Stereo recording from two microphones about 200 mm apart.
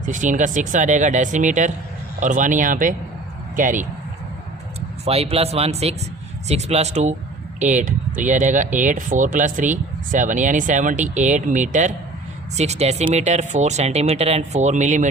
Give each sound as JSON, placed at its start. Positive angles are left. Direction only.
{"t": 0.0, "sound": "speech", "side_deg": -40}
{"t": 5.0, "sound": "speech", "side_deg": -30}